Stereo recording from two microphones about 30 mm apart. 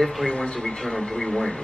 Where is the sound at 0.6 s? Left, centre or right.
Centre.